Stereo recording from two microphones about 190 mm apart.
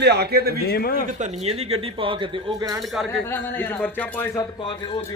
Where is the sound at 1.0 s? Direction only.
40° right (ahead or behind); by 2.8 s 20° right (ahead or behind).